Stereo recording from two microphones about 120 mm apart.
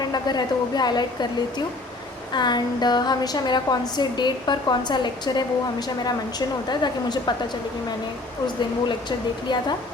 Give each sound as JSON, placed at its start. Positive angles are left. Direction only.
{"t": 0.0, "sound": "a woman's voice", "side_deg": 35}
{"t": 6.7, "sound": "a woman's voice", "side_deg": 35}
{"t": 8.9, "sound": "a woman's voice", "side_deg": 40}